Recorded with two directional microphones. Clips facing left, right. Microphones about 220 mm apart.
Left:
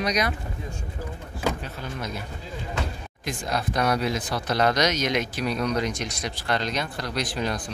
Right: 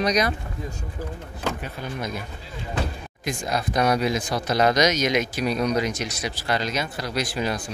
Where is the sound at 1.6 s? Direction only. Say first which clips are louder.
Right 2 dB; 15° right (ahead or behind).